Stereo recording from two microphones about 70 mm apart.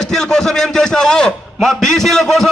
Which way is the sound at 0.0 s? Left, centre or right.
Centre.